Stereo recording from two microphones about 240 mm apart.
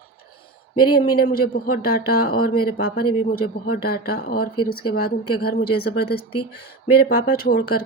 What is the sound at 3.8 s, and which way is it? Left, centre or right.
Speech, left.